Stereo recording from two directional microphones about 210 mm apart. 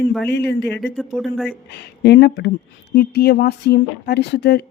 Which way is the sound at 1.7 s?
55° left (ahead or behind).